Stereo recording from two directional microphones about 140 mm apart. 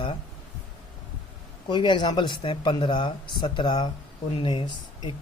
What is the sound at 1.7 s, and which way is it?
Speech, 35° left (ahead or behind).